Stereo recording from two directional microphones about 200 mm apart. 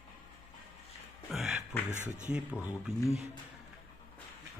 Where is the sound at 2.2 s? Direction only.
5° right (ahead or behind).